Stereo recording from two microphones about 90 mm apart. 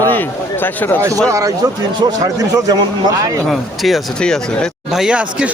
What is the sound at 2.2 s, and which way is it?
Speech, 45° right (ahead or behind).